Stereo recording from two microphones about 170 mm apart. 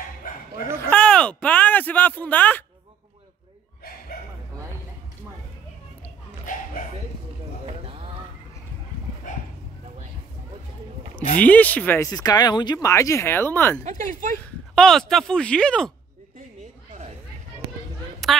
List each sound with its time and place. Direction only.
0.2 s dog: 55° left (ahead or behind)
0.7 s a sound: 10° left (ahead or behind)
7.6 s a sound: 35° right (ahead or behind)
11.3 s speech: 10° left (ahead or behind)
14.8 s speech: 5° left (ahead or behind)
18.2 s a woman's voice: centre (ahead or behind)